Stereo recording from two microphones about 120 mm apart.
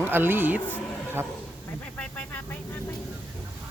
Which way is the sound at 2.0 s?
10° left (ahead or behind).